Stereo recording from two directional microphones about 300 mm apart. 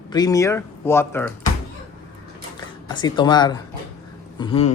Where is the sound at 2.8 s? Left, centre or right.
Centre.